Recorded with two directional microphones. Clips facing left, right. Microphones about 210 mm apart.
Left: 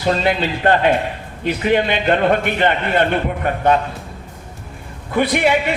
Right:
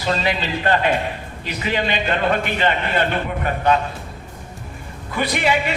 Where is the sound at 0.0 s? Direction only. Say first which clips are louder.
Left 4 dB; 50° left (ahead or behind).